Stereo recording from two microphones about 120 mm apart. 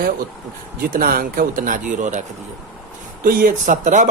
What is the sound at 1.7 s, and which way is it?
Speech, 90° right.